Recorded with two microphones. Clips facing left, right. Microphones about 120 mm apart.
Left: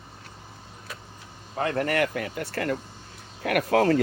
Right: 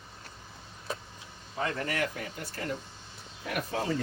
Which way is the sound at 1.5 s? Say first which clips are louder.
Left 7 dB; 60° left (ahead or behind).